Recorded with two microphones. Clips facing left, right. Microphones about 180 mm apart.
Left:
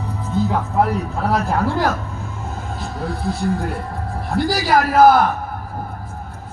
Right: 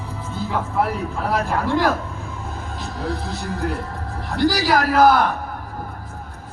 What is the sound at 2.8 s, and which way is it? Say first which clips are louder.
Speech: left 2 dB; 40° right (ahead or behind).